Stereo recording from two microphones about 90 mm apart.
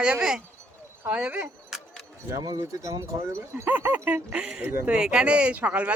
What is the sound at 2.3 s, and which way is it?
Speech, 40° right (ahead or behind).